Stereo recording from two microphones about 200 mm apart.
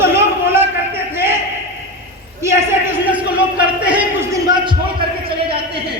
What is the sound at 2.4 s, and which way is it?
A man's voice, 10° right (ahead or behind).